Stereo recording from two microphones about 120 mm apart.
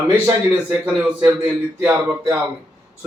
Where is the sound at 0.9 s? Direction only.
15° right (ahead or behind).